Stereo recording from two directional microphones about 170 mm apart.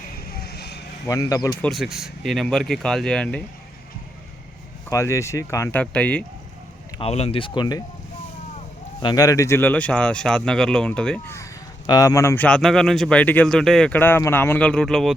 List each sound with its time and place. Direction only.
0.3 s vehicle: 70° left (ahead or behind)
1.0 s a man's voice: 20° left (ahead or behind)
1.6 s speech: centre (ahead or behind)
4.9 s speech: 15° left (ahead or behind)
7.0 s speech: 35° left (ahead or behind)
9.0 s speech: 25° left (ahead or behind); by 11.3 s 5° left (ahead or behind)
11.9 s a man's voice: 20° left (ahead or behind)
12.5 s speech: 5° left (ahead or behind)